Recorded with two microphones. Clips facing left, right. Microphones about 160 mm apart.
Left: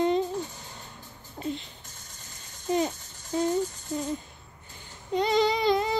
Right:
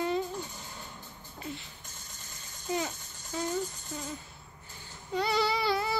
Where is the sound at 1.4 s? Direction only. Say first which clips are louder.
Left 8 dB; 35° left (ahead or behind).